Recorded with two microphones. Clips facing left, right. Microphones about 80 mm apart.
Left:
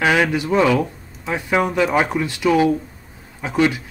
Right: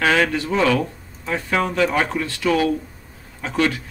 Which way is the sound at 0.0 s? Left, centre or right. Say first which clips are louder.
Left 1 dB; centre.